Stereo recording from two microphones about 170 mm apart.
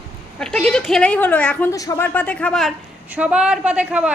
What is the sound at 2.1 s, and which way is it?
A woman's voice, 10° left (ahead or behind).